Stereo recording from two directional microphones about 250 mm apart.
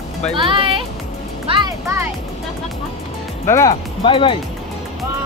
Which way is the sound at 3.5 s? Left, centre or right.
Centre.